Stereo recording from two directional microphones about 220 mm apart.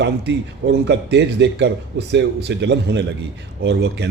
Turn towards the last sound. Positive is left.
turn(degrees=-50)  # may be behind; listen again after turning